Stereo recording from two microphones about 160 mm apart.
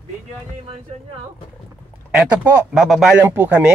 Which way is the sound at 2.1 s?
15° right (ahead or behind).